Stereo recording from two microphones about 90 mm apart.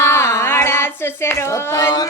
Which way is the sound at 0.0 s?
30° left (ahead or behind).